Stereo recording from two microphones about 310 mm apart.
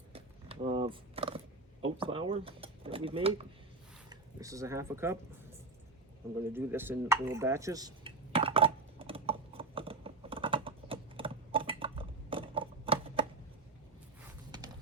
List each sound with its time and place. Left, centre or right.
0.1 s a sound: centre
1.8 s speech: centre
6.5 s dishes: centre